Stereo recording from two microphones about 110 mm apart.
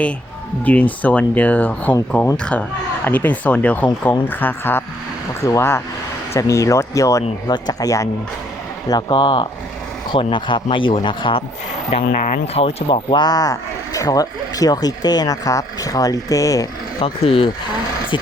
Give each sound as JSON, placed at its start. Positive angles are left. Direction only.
{"t": 0.6, "sound": "speech", "side_deg": 15}
{"t": 5.4, "sound": "speech", "side_deg": 30}
{"t": 8.9, "sound": "speech", "side_deg": 40}
{"t": 11.9, "sound": "speech", "side_deg": 70}
{"t": 13.1, "sound": "speech", "side_deg": 40}
{"t": 17.0, "sound": "speech", "side_deg": 60}